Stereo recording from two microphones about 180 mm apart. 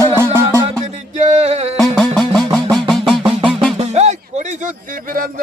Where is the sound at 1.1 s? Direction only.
40° right (ahead or behind).